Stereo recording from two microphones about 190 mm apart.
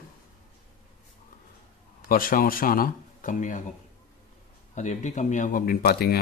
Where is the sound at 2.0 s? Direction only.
50° left (ahead or behind).